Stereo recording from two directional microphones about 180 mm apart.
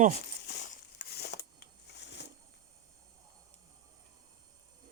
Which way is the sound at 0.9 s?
60° left (ahead or behind).